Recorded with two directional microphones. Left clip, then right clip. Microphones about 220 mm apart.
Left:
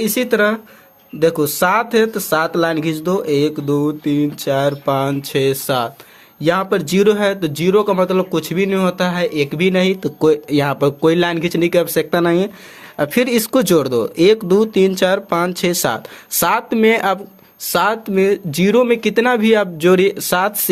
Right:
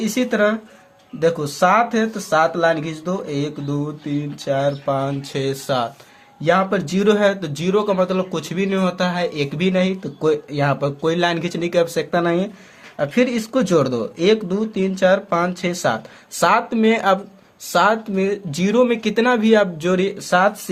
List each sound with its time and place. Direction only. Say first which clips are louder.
0.0 s speech: left 3 dB; 45° left (ahead or behind)